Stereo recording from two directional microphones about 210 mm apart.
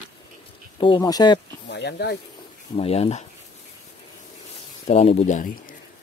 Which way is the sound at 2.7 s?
30° left (ahead or behind).